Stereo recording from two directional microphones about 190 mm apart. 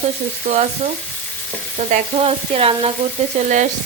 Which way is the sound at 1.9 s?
30° right (ahead or behind).